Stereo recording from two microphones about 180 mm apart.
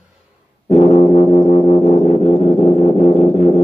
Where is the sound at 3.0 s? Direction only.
40° left (ahead or behind).